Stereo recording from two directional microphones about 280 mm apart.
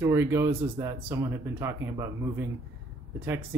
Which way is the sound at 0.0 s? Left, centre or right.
Centre.